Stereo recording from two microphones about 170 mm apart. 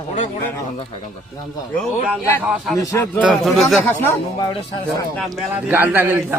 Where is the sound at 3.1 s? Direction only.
5° right (ahead or behind).